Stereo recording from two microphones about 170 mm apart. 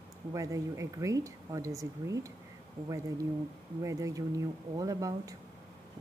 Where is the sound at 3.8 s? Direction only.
20° right (ahead or behind).